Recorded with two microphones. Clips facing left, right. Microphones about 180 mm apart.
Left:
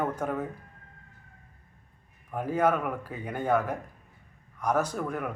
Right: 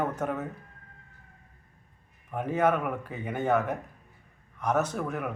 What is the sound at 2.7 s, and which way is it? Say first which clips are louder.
Speech: even; 5° right (ahead or behind).